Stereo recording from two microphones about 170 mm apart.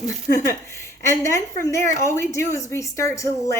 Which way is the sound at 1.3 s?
15° left (ahead or behind).